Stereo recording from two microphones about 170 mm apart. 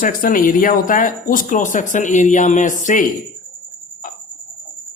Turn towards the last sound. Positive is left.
turn(degrees=50)  # may be behind; listen again after turning